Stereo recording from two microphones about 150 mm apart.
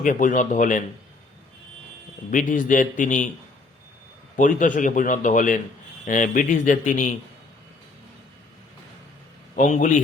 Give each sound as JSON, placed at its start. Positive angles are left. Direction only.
{"t": 0.0, "sound": "a man's voice", "side_deg": 65}
{"t": 2.3, "sound": "a man's voice", "side_deg": 60}
{"t": 4.4, "sound": "a man's voice", "side_deg": 60}
{"t": 9.6, "sound": "a man's voice", "side_deg": 55}